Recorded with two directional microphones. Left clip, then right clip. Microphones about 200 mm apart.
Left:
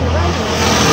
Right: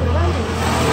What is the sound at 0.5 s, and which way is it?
Vehicle, 45° left (ahead or behind).